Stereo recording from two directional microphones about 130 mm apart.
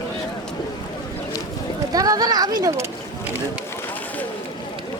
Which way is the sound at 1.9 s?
30° right (ahead or behind).